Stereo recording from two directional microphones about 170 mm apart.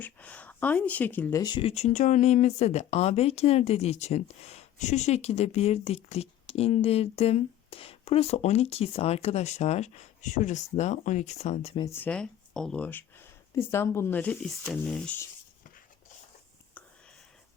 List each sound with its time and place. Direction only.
0.0 s speech: 10° left (ahead or behind)
1.4 s speech: 25° left (ahead or behind)
11.9 s speech: 10° left (ahead or behind)